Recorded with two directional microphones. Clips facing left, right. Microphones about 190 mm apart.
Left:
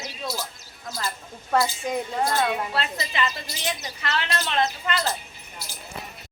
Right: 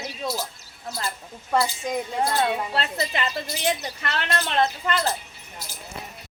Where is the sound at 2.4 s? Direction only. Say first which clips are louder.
Right 1 dB; 25° right (ahead or behind).